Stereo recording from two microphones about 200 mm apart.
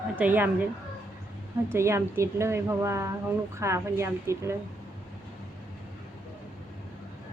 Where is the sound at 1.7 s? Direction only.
15° right (ahead or behind).